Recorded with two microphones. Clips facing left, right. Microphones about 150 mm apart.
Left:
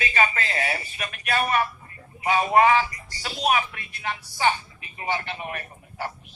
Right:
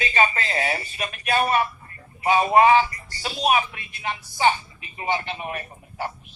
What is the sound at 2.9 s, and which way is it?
Speech, 15° left (ahead or behind).